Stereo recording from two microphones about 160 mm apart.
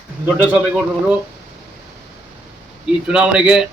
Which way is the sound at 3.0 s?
5° right (ahead or behind).